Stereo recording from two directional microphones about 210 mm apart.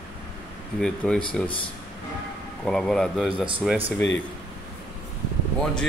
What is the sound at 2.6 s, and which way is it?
Speech, 5° left (ahead or behind).